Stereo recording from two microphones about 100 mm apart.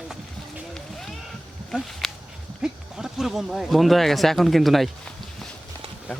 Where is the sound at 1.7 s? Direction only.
5° right (ahead or behind).